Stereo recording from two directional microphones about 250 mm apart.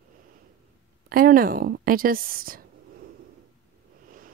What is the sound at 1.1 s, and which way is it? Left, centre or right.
Speech, right.